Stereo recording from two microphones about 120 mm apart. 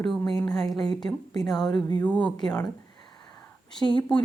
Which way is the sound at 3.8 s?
40° left (ahead or behind).